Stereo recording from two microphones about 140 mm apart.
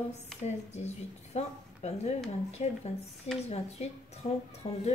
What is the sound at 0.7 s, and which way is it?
A woman's voice, 50° left (ahead or behind).